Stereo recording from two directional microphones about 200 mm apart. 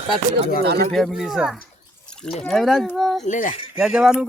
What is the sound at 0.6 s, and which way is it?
Speech, 50° right (ahead or behind).